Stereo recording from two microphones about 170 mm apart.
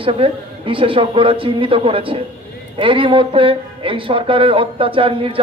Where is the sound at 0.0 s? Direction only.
30° right (ahead or behind).